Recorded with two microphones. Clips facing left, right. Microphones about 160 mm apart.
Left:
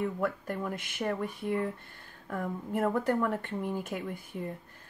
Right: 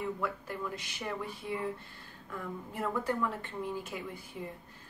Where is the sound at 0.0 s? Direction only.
50° left (ahead or behind).